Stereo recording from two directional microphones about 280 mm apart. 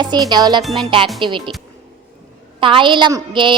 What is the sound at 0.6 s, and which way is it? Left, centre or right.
Music, centre.